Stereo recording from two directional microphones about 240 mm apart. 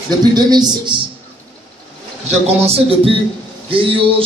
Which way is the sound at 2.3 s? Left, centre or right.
Right.